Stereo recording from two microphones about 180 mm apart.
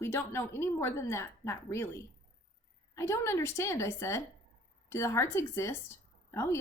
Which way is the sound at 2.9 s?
15° left (ahead or behind).